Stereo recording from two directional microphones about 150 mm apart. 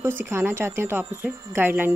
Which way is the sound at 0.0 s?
15° right (ahead or behind).